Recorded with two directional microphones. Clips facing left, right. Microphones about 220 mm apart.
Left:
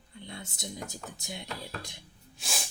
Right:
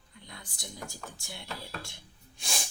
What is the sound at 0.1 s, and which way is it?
Speech, 25° left (ahead or behind).